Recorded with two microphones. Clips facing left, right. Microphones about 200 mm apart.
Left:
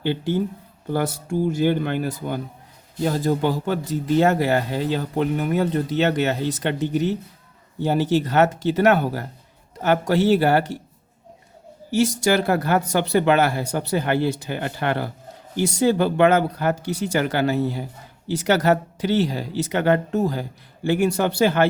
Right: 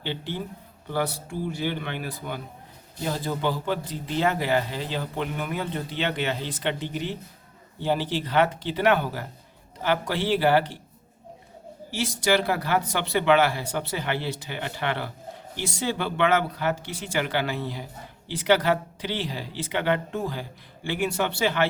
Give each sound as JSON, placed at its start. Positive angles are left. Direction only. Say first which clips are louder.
{"t": 0.0, "sound": "speech", "louder": "left 9 dB", "side_deg": 45}
{"t": 11.9, "sound": "speech", "louder": "left 5 dB", "side_deg": 45}